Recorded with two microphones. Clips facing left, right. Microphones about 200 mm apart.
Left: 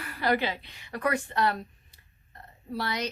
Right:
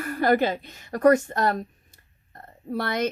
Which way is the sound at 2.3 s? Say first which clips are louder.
Right 5 dB; 50° right (ahead or behind).